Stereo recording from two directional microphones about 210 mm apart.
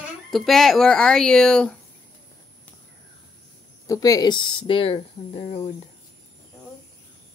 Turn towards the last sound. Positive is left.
turn(degrees=30)  # may be behind; listen again after turning